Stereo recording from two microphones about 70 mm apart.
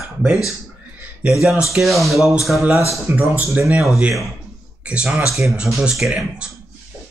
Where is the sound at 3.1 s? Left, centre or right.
Right.